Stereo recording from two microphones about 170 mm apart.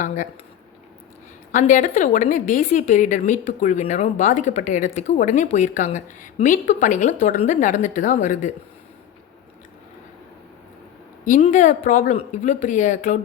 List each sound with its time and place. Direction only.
1.5 s a woman's voice: 50° left (ahead or behind)
11.3 s a woman's voice: 45° left (ahead or behind)